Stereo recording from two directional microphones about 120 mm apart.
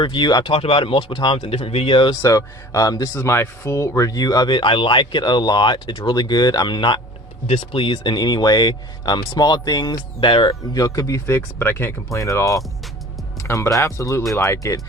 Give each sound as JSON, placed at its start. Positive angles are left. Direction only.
{"t": 0.0, "sound": "speech", "side_deg": 40}
{"t": 2.2, "sound": "speech", "side_deg": 30}
{"t": 7.4, "sound": "speech", "side_deg": 50}
{"t": 10.5, "sound": "speech", "side_deg": 30}